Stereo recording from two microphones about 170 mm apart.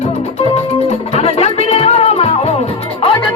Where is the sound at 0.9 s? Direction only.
35° left (ahead or behind).